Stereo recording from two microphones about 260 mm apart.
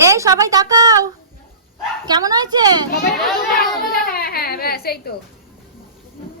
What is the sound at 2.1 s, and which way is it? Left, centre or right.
Speech, centre.